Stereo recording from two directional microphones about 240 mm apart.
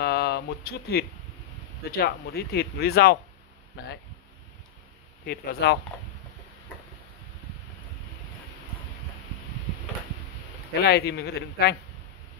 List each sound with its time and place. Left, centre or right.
0.0 s a sound: left
1.9 s speech: left
5.2 s speech: left
10.7 s speech: left